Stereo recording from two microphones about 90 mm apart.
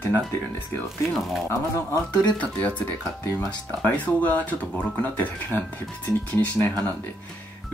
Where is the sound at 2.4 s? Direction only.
15° left (ahead or behind).